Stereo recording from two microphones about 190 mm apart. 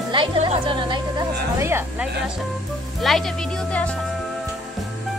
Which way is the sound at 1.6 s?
15° right (ahead or behind).